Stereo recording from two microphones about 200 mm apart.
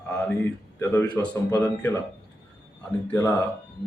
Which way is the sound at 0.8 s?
10° left (ahead or behind).